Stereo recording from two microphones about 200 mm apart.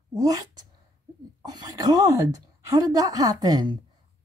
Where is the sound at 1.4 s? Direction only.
20° right (ahead or behind).